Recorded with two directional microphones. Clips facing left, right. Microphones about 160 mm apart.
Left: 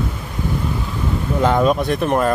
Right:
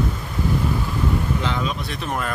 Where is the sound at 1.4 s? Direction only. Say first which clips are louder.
Left 10 dB; 50° left (ahead or behind).